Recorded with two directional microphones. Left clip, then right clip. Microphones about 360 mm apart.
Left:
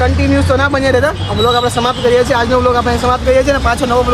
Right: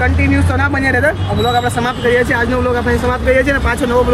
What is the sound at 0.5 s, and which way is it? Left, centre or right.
Speech, centre.